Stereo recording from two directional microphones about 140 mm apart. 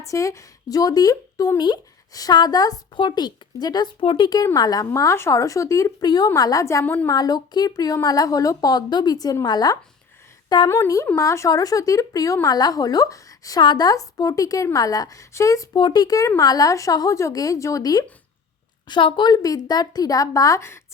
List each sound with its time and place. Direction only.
0.0 s speech: 20° left (ahead or behind)
6.8 s a woman's voice: 15° left (ahead or behind)
7.1 s speech: 30° left (ahead or behind)
15.7 s speech: 30° left (ahead or behind)
18.9 s speech: 35° left (ahead or behind); by 20.8 s 20° left (ahead or behind)